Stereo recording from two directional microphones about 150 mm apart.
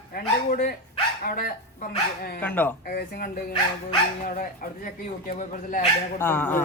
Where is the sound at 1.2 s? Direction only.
75° left (ahead or behind).